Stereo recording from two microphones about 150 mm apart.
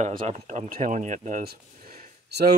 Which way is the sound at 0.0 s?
50° right (ahead or behind).